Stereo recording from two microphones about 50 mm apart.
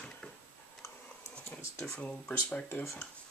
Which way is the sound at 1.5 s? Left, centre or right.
Left.